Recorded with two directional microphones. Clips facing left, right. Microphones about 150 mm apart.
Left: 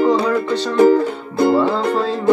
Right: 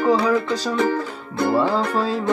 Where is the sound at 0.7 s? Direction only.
30° left (ahead or behind).